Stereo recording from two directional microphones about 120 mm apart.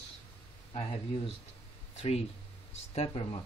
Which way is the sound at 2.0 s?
60° left (ahead or behind).